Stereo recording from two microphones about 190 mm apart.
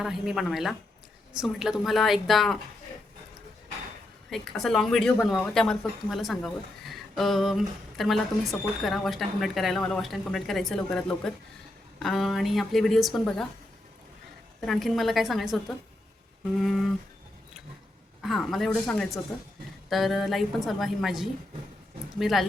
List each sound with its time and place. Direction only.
0.0 s speech: centre (ahead or behind)
4.3 s speech: centre (ahead or behind)
14.6 s speech: centre (ahead or behind)
18.2 s speech: centre (ahead or behind)